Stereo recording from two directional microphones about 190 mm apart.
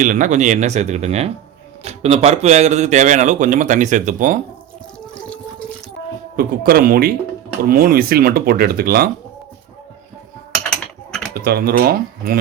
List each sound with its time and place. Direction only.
0.0 s speech: 40° right (ahead or behind)
6.3 s speech: 50° right (ahead or behind)
10.7 s a sound: 5° left (ahead or behind)
11.4 s speech: 55° right (ahead or behind)